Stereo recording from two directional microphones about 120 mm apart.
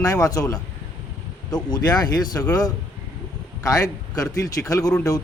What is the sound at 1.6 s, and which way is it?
Speech, 35° left (ahead or behind).